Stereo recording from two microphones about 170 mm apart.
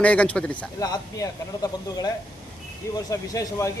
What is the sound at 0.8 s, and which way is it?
Speech, 20° left (ahead or behind).